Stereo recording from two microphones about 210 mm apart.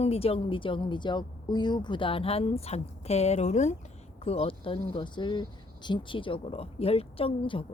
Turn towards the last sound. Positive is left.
turn(degrees=25)  # may be behind; listen again after turning